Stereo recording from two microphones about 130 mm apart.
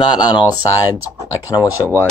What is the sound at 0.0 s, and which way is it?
Speech, 35° left (ahead or behind).